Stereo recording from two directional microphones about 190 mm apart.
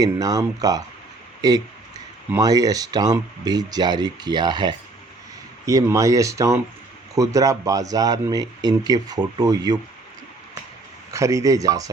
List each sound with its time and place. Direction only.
0.0 s speech: 20° right (ahead or behind)
11.1 s speech: 15° right (ahead or behind)